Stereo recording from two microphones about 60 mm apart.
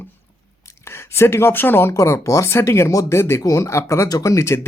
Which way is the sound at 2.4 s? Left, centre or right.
Left.